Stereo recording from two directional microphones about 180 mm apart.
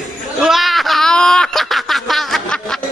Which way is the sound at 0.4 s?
Centre (ahead or behind).